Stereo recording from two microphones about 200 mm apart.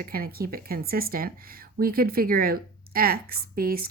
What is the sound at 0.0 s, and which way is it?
Speech, 50° right (ahead or behind).